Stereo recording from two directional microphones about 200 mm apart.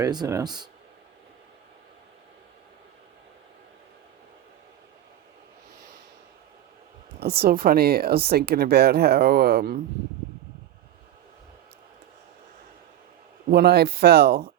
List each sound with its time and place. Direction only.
0.0 s speech: 20° right (ahead or behind)
7.2 s speech: 50° right (ahead or behind)
13.5 s speech: 50° right (ahead or behind)